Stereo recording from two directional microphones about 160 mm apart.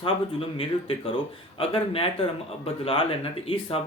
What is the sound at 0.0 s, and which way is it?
Speech, 35° left (ahead or behind).